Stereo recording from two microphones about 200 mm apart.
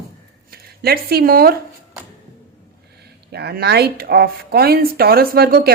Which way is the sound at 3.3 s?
55° right (ahead or behind).